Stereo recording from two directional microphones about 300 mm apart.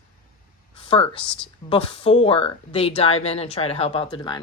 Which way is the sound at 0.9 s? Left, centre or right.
Centre.